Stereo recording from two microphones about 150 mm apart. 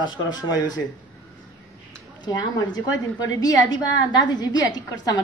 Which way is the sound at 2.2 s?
25° left (ahead or behind).